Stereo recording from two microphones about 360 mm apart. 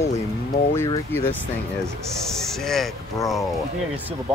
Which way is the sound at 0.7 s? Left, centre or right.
Centre.